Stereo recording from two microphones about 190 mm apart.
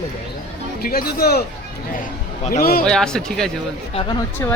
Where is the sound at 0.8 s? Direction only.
50° left (ahead or behind).